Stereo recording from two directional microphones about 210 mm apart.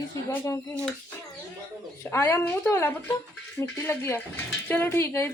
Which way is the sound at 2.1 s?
15° left (ahead or behind).